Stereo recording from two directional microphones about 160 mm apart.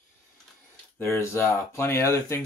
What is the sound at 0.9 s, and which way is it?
Speech, 15° left (ahead or behind).